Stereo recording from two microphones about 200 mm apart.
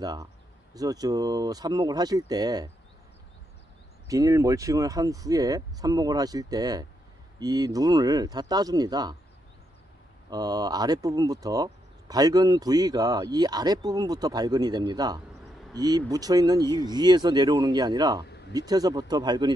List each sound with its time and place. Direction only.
0.0 s speech: 20° right (ahead or behind)
4.1 s speech: 15° right (ahead or behind)
10.3 s speech: 20° right (ahead or behind)